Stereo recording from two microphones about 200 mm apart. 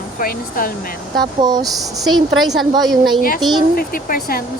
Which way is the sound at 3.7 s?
45° left (ahead or behind).